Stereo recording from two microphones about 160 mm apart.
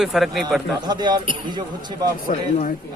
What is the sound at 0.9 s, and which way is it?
Speech, 25° right (ahead or behind).